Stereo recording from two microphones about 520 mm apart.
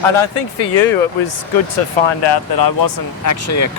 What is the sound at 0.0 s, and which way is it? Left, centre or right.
Speech, left.